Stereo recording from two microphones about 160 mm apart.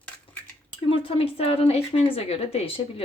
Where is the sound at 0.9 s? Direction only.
35° left (ahead or behind).